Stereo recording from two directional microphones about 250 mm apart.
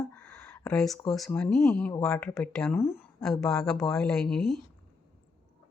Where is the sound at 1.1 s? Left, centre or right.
Centre.